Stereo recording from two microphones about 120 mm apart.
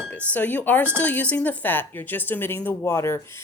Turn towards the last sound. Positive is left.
turn(degrees=20)  # may be behind; listen again after turning